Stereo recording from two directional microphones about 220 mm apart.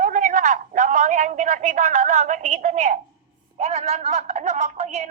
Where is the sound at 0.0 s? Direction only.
35° right (ahead or behind).